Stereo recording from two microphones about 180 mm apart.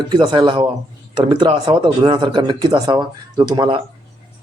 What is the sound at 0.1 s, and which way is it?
Speech, 25° right (ahead or behind).